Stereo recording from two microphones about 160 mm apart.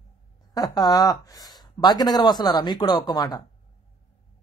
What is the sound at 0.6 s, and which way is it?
Speech, 25° left (ahead or behind).